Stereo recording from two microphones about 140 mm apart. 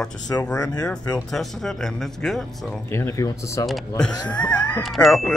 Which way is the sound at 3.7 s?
Centre (ahead or behind).